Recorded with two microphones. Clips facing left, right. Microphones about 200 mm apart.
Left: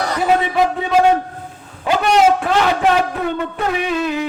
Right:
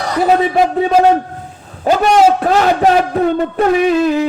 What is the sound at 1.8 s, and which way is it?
A man's voice, 40° right (ahead or behind).